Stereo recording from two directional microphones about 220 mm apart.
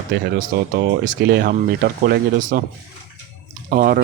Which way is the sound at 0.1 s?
45° right (ahead or behind).